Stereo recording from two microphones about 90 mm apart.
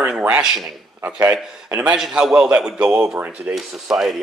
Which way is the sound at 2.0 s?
5° right (ahead or behind).